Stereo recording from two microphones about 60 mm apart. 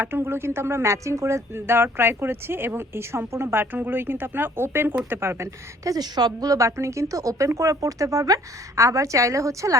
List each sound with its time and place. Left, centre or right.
0.0 s speech: right
5.8 s speech: right